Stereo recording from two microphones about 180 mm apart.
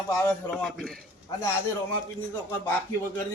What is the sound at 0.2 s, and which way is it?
Speech, 10° left (ahead or behind).